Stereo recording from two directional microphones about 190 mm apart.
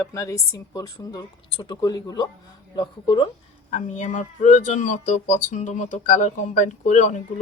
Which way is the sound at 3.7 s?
40° left (ahead or behind).